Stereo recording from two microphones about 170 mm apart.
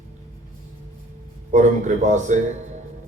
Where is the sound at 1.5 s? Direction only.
45° right (ahead or behind).